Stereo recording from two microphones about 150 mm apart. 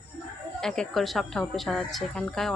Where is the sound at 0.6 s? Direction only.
5° left (ahead or behind).